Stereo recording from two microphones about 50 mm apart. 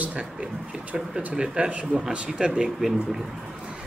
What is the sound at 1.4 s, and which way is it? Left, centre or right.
Speech, centre.